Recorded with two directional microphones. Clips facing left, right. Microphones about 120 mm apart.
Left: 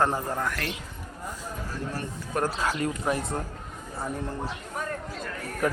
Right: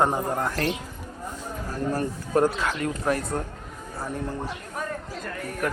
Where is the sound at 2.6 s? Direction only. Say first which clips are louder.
Even; 35° left (ahead or behind).